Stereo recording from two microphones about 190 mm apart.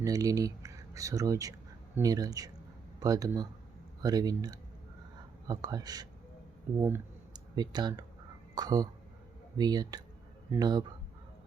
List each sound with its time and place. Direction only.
0.0 s speech: 20° right (ahead or behind)